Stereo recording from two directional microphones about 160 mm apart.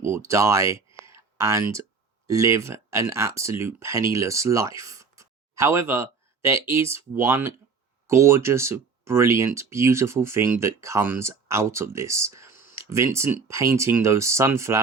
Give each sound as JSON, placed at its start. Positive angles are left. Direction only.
{"t": 0.0, "sound": "speech", "side_deg": -15}
{"t": 0.9, "sound": "a sound", "side_deg": -20}
{"t": 2.2, "sound": "speech", "side_deg": -20}